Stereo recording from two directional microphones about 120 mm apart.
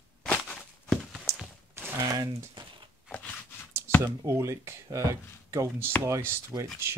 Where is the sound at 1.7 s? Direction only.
30° right (ahead or behind).